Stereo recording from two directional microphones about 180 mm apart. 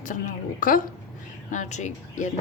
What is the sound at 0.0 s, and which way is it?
A woman's voice, 45° left (ahead or behind).